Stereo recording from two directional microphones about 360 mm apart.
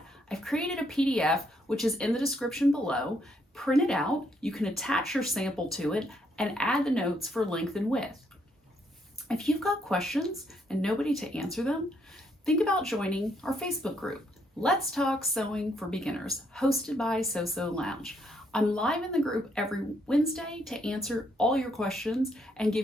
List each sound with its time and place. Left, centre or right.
0.3 s a woman's voice: centre
9.2 s a woman's voice: centre